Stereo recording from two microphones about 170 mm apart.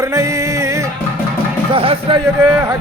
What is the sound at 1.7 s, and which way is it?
A man's voice, 30° right (ahead or behind).